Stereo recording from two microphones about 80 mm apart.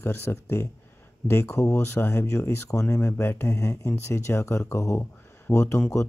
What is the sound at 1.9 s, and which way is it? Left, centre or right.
Speech, left.